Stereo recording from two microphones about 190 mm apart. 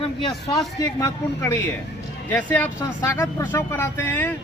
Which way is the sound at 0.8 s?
15° left (ahead or behind).